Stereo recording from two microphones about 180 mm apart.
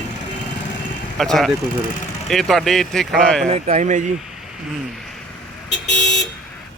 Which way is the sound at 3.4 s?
35° right (ahead or behind).